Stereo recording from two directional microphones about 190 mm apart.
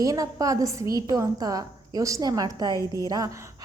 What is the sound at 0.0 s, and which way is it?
A woman's voice, 20° right (ahead or behind).